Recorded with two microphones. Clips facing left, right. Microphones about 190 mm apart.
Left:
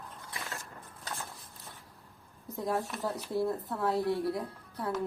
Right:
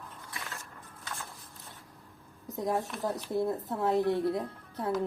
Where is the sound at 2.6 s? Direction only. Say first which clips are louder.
Right 1 dB; 20° right (ahead or behind).